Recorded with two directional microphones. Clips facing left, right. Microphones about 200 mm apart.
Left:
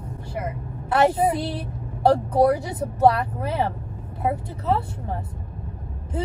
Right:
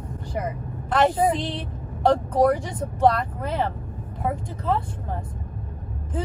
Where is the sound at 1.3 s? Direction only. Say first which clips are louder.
Even; 10° left (ahead or behind).